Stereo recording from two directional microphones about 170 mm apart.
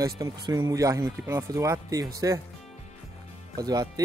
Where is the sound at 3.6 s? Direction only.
20° right (ahead or behind).